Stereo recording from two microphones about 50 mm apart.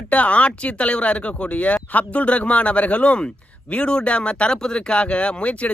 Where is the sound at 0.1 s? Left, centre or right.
Left.